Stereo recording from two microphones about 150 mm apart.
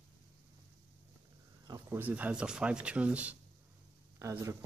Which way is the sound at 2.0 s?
10° right (ahead or behind).